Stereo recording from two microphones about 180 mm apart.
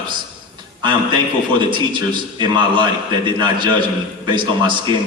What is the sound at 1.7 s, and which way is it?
A man's voice, 25° right (ahead or behind).